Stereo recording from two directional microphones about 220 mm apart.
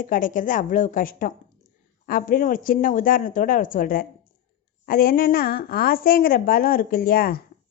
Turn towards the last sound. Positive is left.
turn(degrees=40)  # may be behind; listen again after turning